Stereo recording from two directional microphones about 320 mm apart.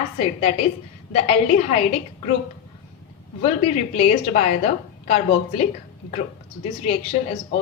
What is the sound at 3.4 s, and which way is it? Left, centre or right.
A woman's voice, centre.